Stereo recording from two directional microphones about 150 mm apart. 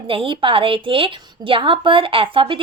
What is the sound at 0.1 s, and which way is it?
A woman's voice, 35° right (ahead or behind).